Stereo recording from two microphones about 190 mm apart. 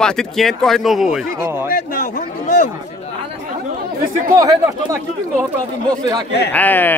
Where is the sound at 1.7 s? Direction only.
50° left (ahead or behind).